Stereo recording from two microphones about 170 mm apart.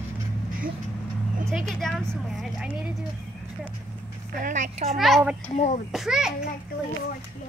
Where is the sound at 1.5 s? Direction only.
Centre (ahead or behind).